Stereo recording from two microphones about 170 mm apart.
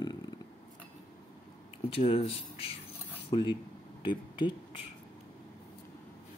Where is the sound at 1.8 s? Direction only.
35° left (ahead or behind).